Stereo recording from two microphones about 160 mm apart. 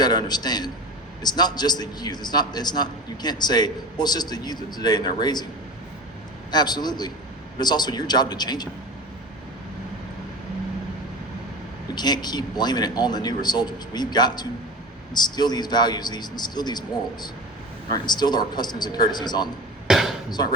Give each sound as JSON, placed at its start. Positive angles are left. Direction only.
{"t": 0.0, "sound": "a man's voice", "side_deg": 25}
{"t": 6.5, "sound": "a man's voice", "side_deg": 25}
{"t": 11.9, "sound": "a man's voice", "side_deg": 25}
{"t": 17.8, "sound": "a man's voice", "side_deg": 25}
{"t": 19.9, "sound": "speech", "side_deg": 0}